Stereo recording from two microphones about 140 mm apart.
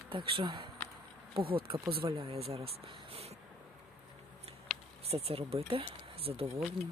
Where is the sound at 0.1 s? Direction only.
40° right (ahead or behind).